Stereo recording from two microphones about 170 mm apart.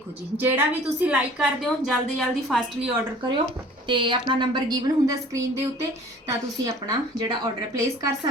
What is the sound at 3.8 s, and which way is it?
A woman's voice, 30° right (ahead or behind).